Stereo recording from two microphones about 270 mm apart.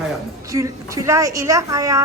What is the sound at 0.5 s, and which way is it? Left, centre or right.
Speech, centre.